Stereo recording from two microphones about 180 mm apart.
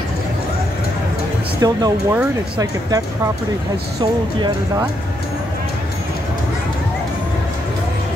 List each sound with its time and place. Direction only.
1.6 s speech: 20° right (ahead or behind)
4.0 s speech: 20° right (ahead or behind)